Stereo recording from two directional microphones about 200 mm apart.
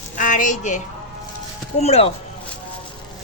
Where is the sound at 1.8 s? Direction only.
30° left (ahead or behind).